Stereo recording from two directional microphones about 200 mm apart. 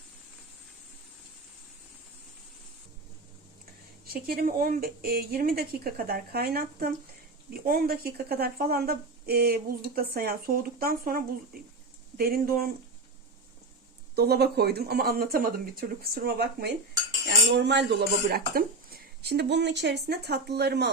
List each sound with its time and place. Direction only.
4.0 s speech: 50° right (ahead or behind)
14.2 s speech: 55° right (ahead or behind)